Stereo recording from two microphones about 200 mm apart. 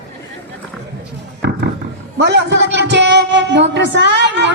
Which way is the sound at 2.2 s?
60° right (ahead or behind).